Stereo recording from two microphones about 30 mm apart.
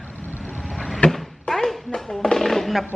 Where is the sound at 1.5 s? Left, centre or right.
Centre.